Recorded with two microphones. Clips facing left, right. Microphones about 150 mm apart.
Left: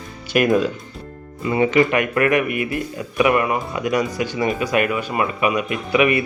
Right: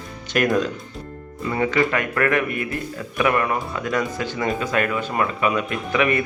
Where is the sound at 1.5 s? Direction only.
20° left (ahead or behind).